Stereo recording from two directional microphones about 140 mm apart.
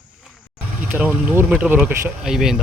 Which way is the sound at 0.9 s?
10° right (ahead or behind).